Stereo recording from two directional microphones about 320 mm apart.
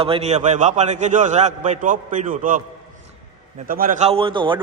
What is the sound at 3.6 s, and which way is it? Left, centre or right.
Speech, right.